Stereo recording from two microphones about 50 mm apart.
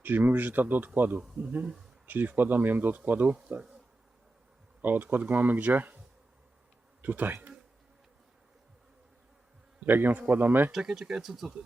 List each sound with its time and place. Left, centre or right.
0.0 s speech: right
4.8 s speech: right
7.0 s speech: right
9.8 s speech: right
10.7 s speech: centre